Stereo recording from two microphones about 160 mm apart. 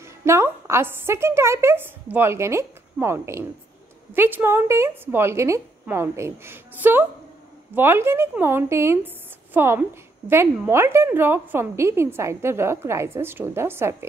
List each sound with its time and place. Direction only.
0.0 s a woman's voice: 15° right (ahead or behind)